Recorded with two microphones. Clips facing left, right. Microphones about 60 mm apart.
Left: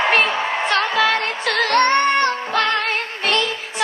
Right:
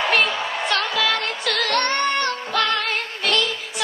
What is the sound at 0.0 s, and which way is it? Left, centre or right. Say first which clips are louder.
Music: left 3 dB; left.